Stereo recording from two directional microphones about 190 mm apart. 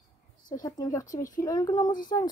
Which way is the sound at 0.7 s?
20° left (ahead or behind).